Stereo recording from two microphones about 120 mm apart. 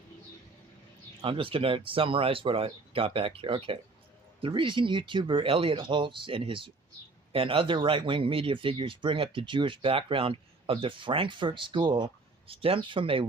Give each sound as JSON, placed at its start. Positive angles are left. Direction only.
{"t": 1.2, "sound": "speech", "side_deg": -50}